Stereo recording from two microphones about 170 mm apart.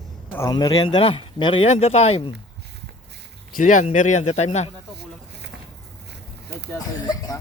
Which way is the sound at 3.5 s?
50° left (ahead or behind).